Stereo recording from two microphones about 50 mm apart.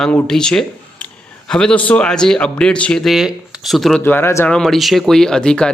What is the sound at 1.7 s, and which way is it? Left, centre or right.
Speech, left.